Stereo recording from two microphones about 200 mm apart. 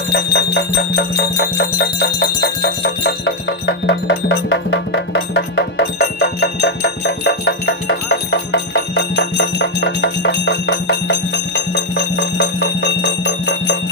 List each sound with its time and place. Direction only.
0.1 s jingle bell: 55° left (ahead or behind)